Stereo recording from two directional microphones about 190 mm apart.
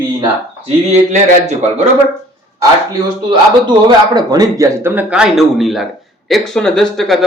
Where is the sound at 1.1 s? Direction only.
35° right (ahead or behind).